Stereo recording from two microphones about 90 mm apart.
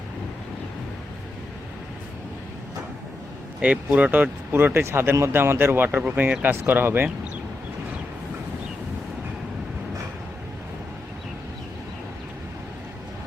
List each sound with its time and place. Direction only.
3.6 s speech: 15° right (ahead or behind)